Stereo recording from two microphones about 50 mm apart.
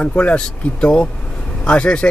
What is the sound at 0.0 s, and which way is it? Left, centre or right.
Speech, left.